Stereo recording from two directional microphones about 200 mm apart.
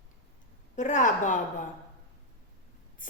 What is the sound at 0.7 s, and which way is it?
Speech, 40° left (ahead or behind).